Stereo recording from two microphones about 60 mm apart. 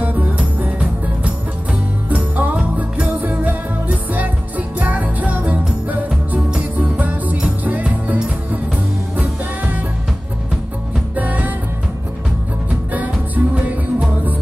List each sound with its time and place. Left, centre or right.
0.0 s music: right
11.1 s music: right
12.9 s music: right